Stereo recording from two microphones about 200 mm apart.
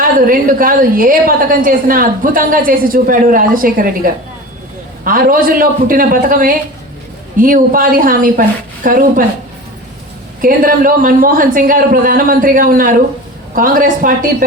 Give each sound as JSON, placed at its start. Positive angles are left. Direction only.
{"t": 0.0, "sound": "a woman's voice", "side_deg": -45}
{"t": 10.4, "sound": "a woman's voice", "side_deg": -45}